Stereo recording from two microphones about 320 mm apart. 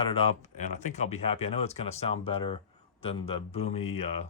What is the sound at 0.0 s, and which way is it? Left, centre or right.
Speech, centre.